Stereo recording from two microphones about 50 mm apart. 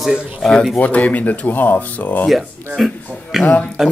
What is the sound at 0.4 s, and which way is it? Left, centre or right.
Speech, centre.